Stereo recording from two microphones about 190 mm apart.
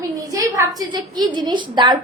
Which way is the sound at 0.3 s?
15° right (ahead or behind).